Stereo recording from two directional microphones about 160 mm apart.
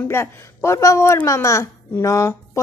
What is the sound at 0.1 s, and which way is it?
A woman's voice, 15° left (ahead or behind).